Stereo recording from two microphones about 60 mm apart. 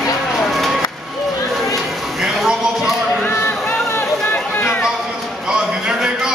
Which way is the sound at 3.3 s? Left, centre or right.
Left.